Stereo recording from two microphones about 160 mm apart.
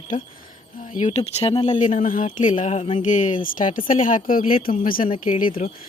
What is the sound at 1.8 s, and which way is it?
Speech, 55° left (ahead or behind).